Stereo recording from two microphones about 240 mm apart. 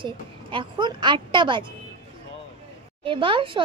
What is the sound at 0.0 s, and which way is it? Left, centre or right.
A child's voice, centre.